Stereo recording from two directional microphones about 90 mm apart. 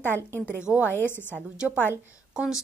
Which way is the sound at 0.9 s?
25° left (ahead or behind).